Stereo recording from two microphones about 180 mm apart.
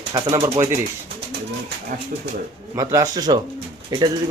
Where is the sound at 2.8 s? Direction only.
20° right (ahead or behind).